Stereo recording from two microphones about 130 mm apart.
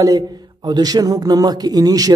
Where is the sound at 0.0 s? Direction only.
30° right (ahead or behind).